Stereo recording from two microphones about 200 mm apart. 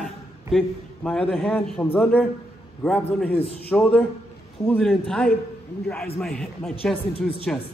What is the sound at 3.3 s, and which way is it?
Speech, 30° left (ahead or behind).